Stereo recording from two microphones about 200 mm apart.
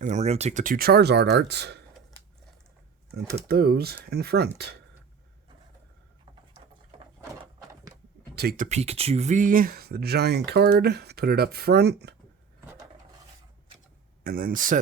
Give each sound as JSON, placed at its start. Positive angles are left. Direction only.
{"t": 0.0, "sound": "speech", "side_deg": -35}
{"t": 3.5, "sound": "speech", "side_deg": -50}
{"t": 8.4, "sound": "speech", "side_deg": -45}
{"t": 12.6, "sound": "a sound", "side_deg": -15}
{"t": 14.3, "sound": "speech", "side_deg": -45}